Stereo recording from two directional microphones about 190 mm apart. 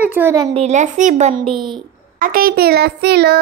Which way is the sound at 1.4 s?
25° right (ahead or behind).